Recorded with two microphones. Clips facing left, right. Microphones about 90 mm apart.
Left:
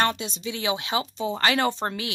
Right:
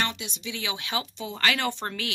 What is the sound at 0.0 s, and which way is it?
Speech, 45° left (ahead or behind).